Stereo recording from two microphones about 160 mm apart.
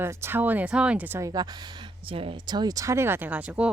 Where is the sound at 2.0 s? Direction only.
35° right (ahead or behind); by 3.6 s 10° right (ahead or behind).